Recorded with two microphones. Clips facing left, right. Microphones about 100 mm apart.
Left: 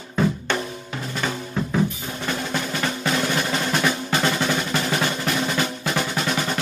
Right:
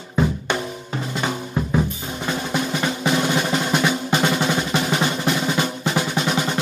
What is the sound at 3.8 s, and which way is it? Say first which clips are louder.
Drum roll: right 2 dB; 20° right (ahead or behind).